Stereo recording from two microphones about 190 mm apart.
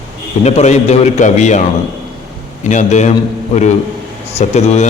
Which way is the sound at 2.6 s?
40° left (ahead or behind).